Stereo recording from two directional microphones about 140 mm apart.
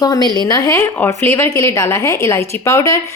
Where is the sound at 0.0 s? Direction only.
30° left (ahead or behind).